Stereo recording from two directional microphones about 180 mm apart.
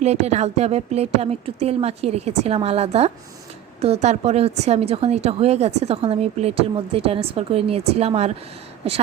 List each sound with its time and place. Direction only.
0.0 s a woman's voice: 35° right (ahead or behind)